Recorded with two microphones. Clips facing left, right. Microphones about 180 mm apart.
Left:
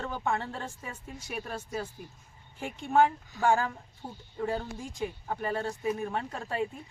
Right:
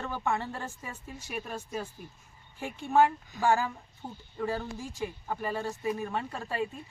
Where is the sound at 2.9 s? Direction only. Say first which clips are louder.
Even; 5° right (ahead or behind).